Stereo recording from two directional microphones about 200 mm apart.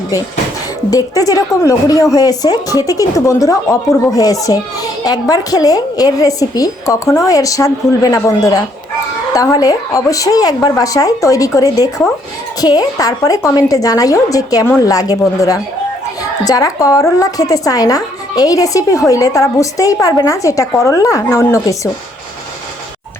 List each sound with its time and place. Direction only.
0.9 s a woman's voice: 15° left (ahead or behind)